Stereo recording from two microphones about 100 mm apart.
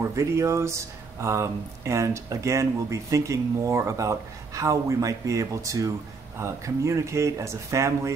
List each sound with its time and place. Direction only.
0.0 s speech: 30° right (ahead or behind)